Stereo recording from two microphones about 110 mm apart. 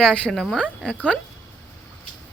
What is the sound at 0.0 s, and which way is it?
Speech, 5° left (ahead or behind).